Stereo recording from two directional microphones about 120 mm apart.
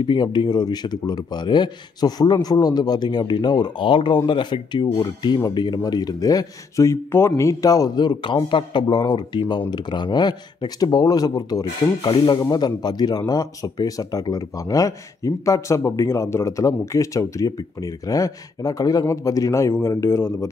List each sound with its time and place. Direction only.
0.0 s speech: 40° left (ahead or behind); by 20.4 s 20° left (ahead or behind)